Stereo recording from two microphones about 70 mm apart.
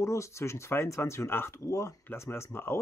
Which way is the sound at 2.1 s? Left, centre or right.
Left.